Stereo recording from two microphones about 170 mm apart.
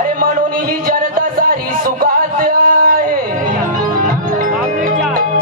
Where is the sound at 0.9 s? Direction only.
55° right (ahead or behind).